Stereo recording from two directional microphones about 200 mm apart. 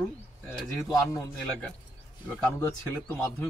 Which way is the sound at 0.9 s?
20° left (ahead or behind).